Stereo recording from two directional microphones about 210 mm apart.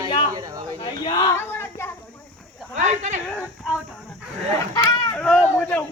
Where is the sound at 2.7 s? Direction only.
35° right (ahead or behind).